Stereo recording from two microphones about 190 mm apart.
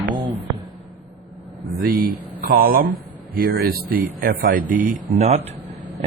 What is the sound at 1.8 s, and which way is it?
A man's voice, 50° right (ahead or behind).